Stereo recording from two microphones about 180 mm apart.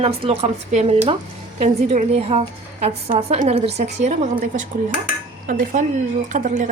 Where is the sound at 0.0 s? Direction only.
35° right (ahead or behind).